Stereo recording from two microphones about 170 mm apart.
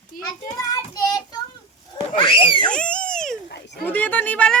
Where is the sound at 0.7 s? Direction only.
20° left (ahead or behind).